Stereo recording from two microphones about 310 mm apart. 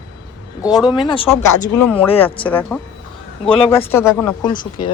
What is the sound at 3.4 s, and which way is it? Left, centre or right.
Speech, centre.